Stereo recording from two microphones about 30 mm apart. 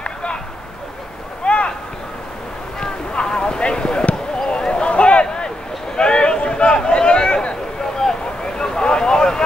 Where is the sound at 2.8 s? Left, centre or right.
Left.